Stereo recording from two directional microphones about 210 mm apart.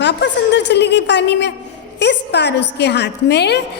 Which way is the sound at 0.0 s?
55° left (ahead or behind).